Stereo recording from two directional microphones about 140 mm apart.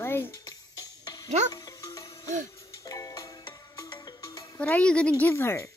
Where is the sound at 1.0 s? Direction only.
25° left (ahead or behind).